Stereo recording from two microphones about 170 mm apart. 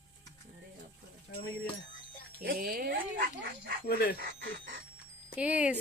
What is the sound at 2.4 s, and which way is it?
Speech, 60° right (ahead or behind).